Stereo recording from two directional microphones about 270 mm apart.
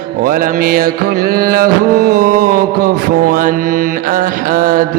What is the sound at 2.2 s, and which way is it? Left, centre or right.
Speech, right.